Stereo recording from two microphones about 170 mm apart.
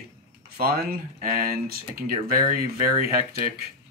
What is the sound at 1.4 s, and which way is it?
Speech, 60° right (ahead or behind).